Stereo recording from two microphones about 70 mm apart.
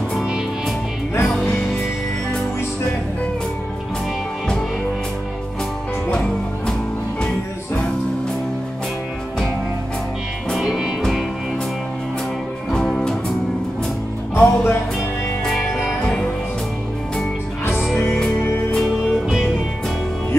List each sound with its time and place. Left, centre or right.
1.2 s music: centre
10.5 s music: centre
12.7 s music: centre
14.3 s music: left
15.4 s music: centre
18.1 s music: centre